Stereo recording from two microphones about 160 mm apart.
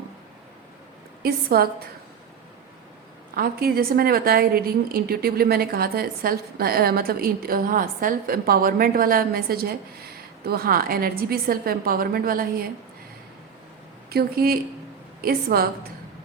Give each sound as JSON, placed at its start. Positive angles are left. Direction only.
{"t": 1.2, "sound": "a woman's voice", "side_deg": -70}
{"t": 3.3, "sound": "a woman's voice", "side_deg": -70}
{"t": 14.1, "sound": "a woman's voice", "side_deg": -75}